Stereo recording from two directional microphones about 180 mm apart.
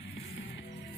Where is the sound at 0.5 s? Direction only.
75° left (ahead or behind).